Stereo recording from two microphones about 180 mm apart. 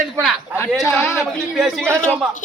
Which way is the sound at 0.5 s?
10° left (ahead or behind).